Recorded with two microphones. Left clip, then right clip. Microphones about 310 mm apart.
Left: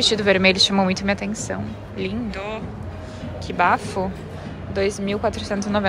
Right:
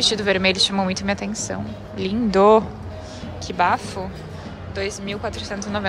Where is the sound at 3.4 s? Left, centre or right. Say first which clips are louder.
Left 1 dB; centre.